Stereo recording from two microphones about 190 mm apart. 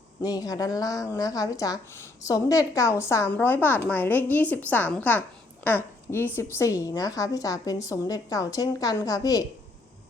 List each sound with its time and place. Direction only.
0.2 s a woman's voice: 20° left (ahead or behind)